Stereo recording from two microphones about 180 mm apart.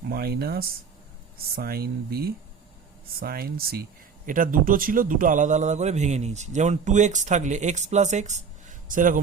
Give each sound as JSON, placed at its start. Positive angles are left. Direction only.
{"t": 0.1, "sound": "a man's voice", "side_deg": -60}